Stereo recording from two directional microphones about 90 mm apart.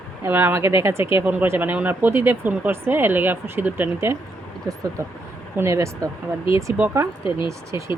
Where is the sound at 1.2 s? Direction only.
20° right (ahead or behind).